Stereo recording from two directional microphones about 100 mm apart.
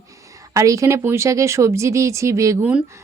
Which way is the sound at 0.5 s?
35° right (ahead or behind).